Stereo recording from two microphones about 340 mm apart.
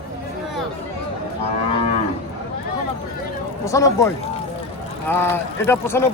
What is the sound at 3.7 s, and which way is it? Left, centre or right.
Speech, centre.